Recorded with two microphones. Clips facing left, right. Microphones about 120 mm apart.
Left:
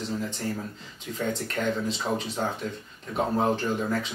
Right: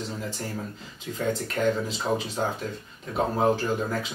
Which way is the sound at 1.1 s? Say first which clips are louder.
Right 2 dB; centre (ahead or behind).